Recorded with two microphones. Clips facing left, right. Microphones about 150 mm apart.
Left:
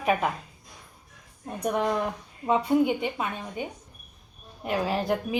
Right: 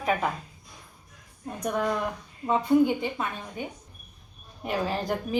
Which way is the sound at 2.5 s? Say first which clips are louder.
Right 1 dB; 15° left (ahead or behind).